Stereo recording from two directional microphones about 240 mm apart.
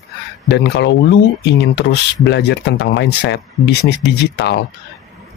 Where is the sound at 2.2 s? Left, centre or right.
Left.